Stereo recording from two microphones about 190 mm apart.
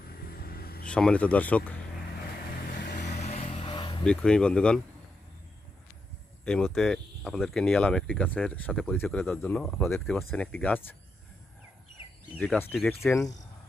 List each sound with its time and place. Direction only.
0.3 s a sound: 55° left (ahead or behind)
0.9 s speech: 5° left (ahead or behind)
2.7 s vehicle: 50° left (ahead or behind)
3.2 s vehicle: 35° left (ahead or behind)
4.0 s speech: 5° left (ahead or behind)
6.4 s speech: 5° left (ahead or behind)
12.4 s speech: 5° left (ahead or behind)